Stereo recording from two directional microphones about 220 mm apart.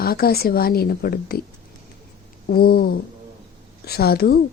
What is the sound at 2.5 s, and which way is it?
A woman's voice, 45° left (ahead or behind).